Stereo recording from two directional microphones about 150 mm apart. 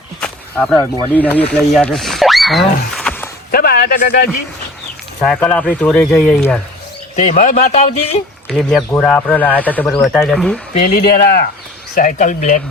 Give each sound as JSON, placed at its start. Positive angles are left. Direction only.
{"t": 0.2, "sound": "a sound", "side_deg": 5}
{"t": 1.1, "sound": "speech", "side_deg": 10}
{"t": 3.5, "sound": "speech", "side_deg": 80}
{"t": 5.2, "sound": "speech", "side_deg": 5}
{"t": 7.2, "sound": "speech", "side_deg": 55}
{"t": 8.4, "sound": "speech", "side_deg": 5}
{"t": 10.8, "sound": "speech", "side_deg": 85}
{"t": 12.1, "sound": "speech", "side_deg": 55}